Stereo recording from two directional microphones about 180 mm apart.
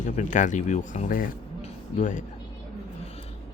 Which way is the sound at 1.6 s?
45° left (ahead or behind).